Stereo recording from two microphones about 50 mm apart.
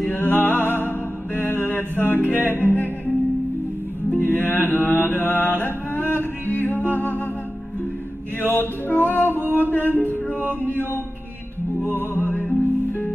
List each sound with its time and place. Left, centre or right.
0.1 s music: left
4.2 s mantra: left
8.4 s music: left
11.8 s music: left